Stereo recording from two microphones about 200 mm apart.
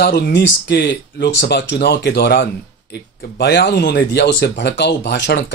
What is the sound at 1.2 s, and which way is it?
Speech, 60° left (ahead or behind).